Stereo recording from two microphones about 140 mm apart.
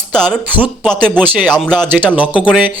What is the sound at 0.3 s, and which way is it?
Speech, 10° right (ahead or behind).